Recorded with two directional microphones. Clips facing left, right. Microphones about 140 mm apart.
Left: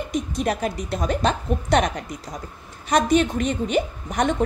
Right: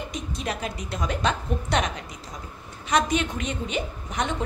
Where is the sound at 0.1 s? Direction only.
50° left (ahead or behind).